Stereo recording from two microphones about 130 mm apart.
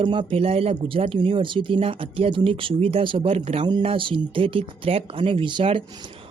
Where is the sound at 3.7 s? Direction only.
40° right (ahead or behind).